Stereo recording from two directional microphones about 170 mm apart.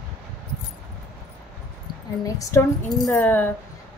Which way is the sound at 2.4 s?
20° left (ahead or behind).